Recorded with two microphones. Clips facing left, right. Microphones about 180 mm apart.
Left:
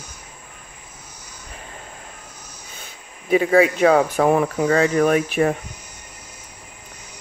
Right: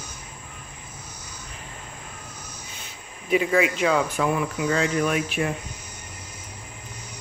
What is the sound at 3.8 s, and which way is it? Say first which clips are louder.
Speech: left 7 dB; 50° left (ahead or behind).